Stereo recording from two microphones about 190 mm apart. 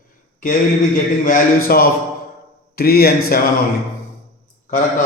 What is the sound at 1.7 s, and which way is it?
A man's voice, 50° left (ahead or behind).